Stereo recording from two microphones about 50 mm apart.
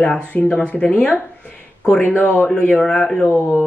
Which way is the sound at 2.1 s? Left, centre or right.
Left.